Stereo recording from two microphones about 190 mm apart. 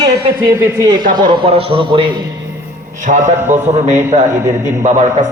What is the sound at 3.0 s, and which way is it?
A man's voice, 40° right (ahead or behind).